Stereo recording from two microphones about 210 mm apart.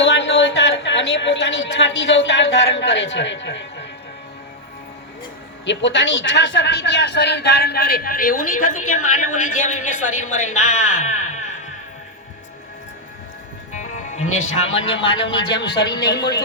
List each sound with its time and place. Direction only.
0.0 s a woman's voice: 60° left (ahead or behind)
5.6 s a man's voice: 60° left (ahead or behind); by 8.8 s 40° left (ahead or behind)
8.8 s a woman's voice: 90° left
9.0 s a woman's voice: 35° left (ahead or behind)
13.7 s music: 35° left (ahead or behind)
14.5 s a woman's voice: 30° left (ahead or behind)
16.0 s a man's voice: 50° left (ahead or behind)